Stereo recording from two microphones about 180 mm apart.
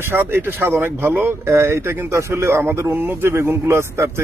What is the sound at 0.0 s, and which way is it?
A man's voice, 15° right (ahead or behind).